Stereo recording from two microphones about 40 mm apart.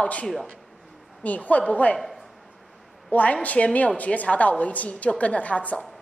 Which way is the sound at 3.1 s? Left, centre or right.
Left.